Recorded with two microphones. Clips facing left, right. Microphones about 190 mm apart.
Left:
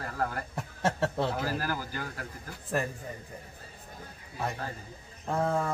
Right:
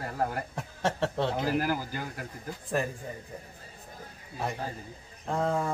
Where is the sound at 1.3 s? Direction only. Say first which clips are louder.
Right 4 dB; 20° right (ahead or behind).